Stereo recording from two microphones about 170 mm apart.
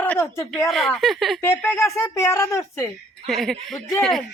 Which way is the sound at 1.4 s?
10° left (ahead or behind).